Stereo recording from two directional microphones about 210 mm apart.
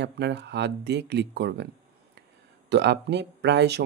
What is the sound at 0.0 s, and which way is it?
Speech, 55° right (ahead or behind).